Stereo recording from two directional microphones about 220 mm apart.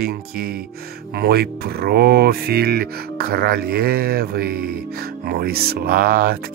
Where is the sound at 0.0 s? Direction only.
40° right (ahead or behind).